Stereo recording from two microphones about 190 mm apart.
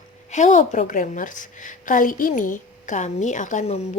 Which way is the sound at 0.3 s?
40° left (ahead or behind).